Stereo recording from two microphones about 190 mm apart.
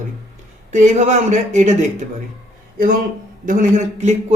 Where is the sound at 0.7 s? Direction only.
40° right (ahead or behind).